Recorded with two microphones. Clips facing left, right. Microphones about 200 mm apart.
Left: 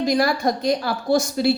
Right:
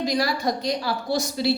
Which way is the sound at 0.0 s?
50° left (ahead or behind).